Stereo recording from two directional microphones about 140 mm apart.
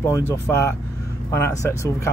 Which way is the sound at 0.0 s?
20° left (ahead or behind).